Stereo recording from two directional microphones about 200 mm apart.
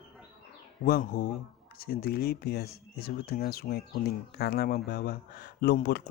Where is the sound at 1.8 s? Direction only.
50° left (ahead or behind).